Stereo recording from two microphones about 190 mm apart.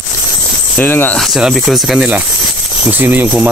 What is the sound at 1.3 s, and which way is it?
Speech, centre (ahead or behind).